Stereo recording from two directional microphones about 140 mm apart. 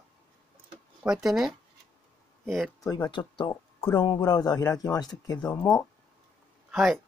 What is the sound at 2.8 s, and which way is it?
A man's voice, 30° left (ahead or behind).